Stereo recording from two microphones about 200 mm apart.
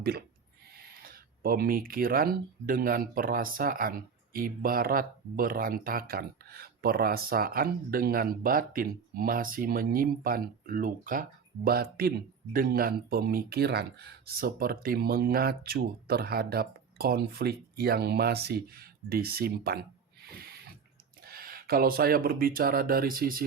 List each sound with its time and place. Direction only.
0.0 s speech: 50° right (ahead or behind)
21.2 s speech: 50° right (ahead or behind)